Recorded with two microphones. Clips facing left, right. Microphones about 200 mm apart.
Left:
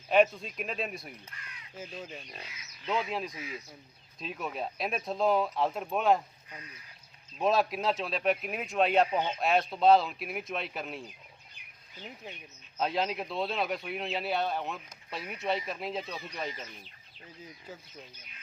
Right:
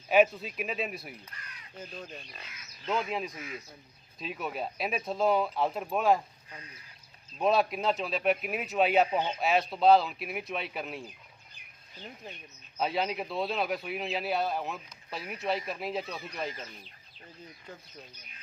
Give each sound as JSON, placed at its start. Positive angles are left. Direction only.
{"t": 0.1, "sound": "speech", "side_deg": -5}
{"t": 3.3, "sound": "speech", "side_deg": -50}
{"t": 4.2, "sound": "speech", "side_deg": 0}
{"t": 7.3, "sound": "speech", "side_deg": 0}
{"t": 12.7, "sound": "speech", "side_deg": 0}
{"t": 17.7, "sound": "speech", "side_deg": 5}